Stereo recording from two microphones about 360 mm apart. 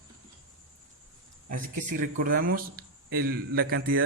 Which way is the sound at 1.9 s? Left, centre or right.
Right.